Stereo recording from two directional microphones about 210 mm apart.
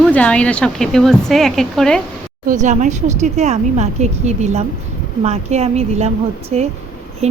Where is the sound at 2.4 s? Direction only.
35° right (ahead or behind).